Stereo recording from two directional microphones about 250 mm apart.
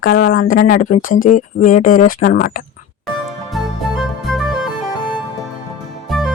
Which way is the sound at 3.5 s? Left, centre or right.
Centre.